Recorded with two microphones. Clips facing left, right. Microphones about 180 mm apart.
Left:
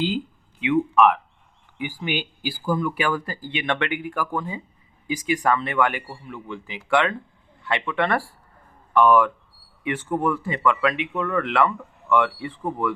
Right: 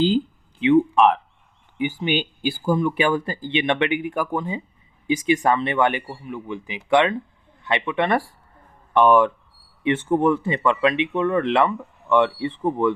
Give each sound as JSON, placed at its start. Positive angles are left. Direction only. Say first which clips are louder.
{"t": 0.6, "sound": "speech", "louder": "right 3 dB", "side_deg": -30}